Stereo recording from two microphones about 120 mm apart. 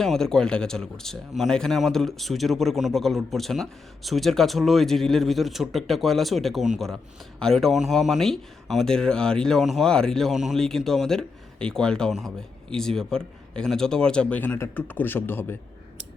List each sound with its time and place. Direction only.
0.0 s speech: 5° left (ahead or behind)